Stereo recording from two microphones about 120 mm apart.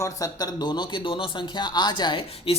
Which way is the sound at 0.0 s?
30° left (ahead or behind).